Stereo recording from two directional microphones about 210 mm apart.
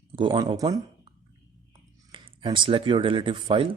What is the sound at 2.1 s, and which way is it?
Speech, 25° right (ahead or behind).